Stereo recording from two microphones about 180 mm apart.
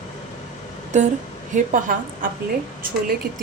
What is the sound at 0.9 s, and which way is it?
A woman's voice, 40° right (ahead or behind).